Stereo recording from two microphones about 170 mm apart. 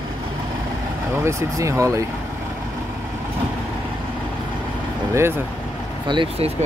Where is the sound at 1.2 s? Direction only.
15° right (ahead or behind).